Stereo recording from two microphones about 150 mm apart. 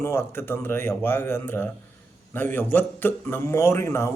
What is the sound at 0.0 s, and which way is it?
A man's voice, 15° left (ahead or behind).